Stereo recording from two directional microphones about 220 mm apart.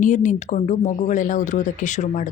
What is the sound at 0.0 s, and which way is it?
Speech, 35° left (ahead or behind).